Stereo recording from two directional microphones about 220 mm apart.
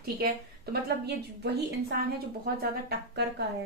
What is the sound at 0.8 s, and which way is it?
A woman's voice, 50° right (ahead or behind).